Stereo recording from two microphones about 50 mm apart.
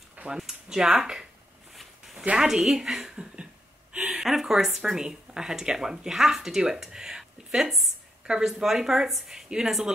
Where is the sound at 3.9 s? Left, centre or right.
Right.